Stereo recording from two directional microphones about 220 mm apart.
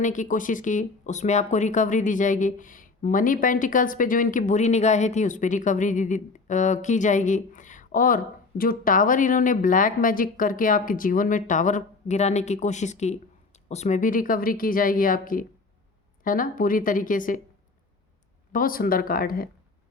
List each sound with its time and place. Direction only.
0.0 s speech: 35° left (ahead or behind)
18.5 s speech: 40° left (ahead or behind)